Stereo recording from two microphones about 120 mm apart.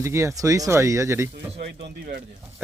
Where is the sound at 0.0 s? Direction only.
25° right (ahead or behind).